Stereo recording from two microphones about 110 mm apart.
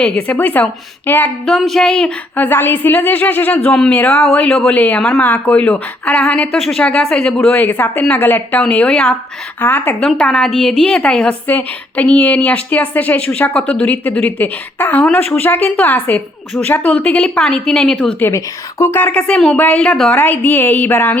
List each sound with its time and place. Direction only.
0.0 s a woman's voice: 10° left (ahead or behind)
1.5 s speech: 5° left (ahead or behind)
2.3 s a woman's voice: 15° left (ahead or behind)
18.2 s a woman's voice: 25° left (ahead or behind)